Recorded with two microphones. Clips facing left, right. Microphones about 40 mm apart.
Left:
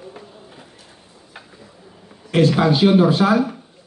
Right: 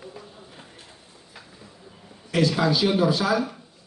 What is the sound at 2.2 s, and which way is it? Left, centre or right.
Speech, left.